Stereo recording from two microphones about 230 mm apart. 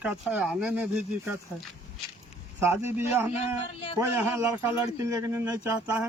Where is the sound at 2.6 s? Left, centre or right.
Centre.